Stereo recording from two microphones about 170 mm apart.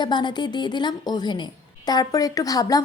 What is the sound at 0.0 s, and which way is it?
A woman's voice, 25° left (ahead or behind).